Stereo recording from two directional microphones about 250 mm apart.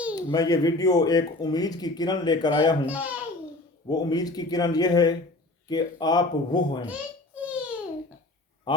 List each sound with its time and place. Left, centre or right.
0.2 s speech: centre
2.8 s a child's voice: centre
3.8 s speech: centre
7.3 s a sound: centre
8.7 s speech: centre